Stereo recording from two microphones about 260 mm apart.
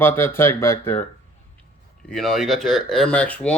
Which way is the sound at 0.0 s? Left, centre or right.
Centre.